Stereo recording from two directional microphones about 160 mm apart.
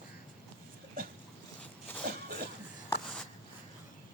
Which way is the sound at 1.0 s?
65° right (ahead or behind).